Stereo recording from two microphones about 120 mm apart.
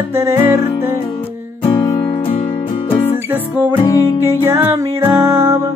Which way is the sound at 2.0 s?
45° left (ahead or behind).